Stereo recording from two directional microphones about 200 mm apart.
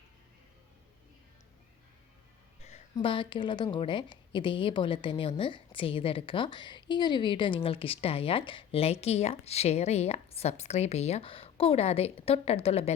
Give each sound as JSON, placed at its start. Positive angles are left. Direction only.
{"t": 2.9, "sound": "a woman's voice", "side_deg": 25}